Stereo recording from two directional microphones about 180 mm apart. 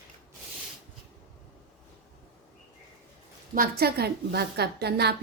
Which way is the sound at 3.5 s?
55° right (ahead or behind).